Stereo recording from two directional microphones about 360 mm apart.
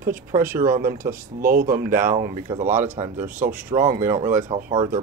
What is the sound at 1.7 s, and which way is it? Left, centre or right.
Speech, right.